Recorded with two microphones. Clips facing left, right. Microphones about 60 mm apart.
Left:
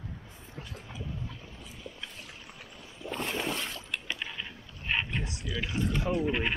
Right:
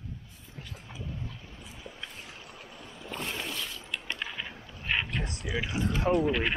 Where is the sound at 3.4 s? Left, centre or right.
Left.